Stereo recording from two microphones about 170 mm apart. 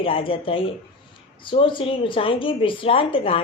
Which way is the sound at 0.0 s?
30° left (ahead or behind).